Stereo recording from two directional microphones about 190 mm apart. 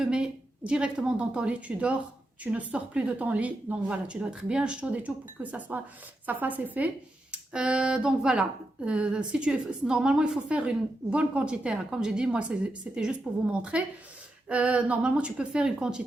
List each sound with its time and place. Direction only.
0.0 s a woman's voice: 5° right (ahead or behind)